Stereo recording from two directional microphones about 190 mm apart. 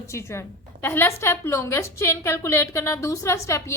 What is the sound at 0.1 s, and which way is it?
A woman's voice, 15° left (ahead or behind).